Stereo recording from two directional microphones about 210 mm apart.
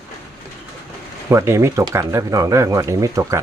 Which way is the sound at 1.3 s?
15° right (ahead or behind).